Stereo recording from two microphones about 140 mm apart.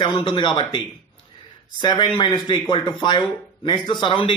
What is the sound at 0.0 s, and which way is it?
A man's voice, 35° left (ahead or behind).